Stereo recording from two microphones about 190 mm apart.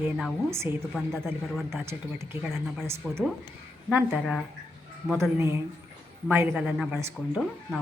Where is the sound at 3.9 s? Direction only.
5° right (ahead or behind).